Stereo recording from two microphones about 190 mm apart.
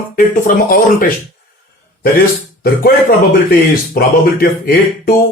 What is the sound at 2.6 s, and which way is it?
Speech, 50° left (ahead or behind).